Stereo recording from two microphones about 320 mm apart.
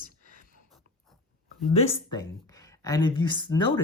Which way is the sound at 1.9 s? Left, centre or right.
Centre.